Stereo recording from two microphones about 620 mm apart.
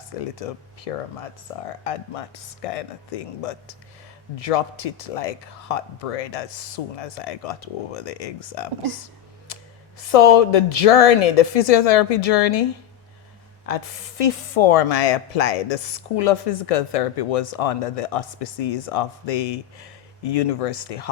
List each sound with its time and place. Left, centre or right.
0.2 s speech: left
9.5 s a sound: left
10.0 s speech: left
13.7 s speech: left